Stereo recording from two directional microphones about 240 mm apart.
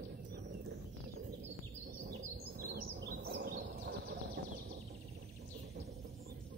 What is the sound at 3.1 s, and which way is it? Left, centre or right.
Bird, right.